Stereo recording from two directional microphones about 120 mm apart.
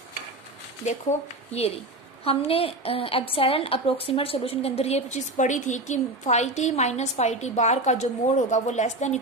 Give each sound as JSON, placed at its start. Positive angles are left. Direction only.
{"t": 1.5, "sound": "a woman's voice", "side_deg": 60}
{"t": 4.8, "sound": "a woman's voice", "side_deg": 65}